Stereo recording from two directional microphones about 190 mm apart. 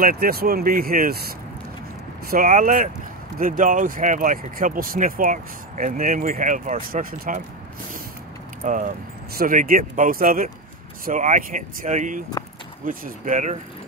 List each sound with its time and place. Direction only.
0.0 s speech: 55° right (ahead or behind)
2.3 s speech: 45° right (ahead or behind)
8.6 s speech: 45° right (ahead or behind)